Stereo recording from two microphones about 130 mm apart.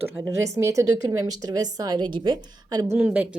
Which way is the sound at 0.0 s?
20° right (ahead or behind).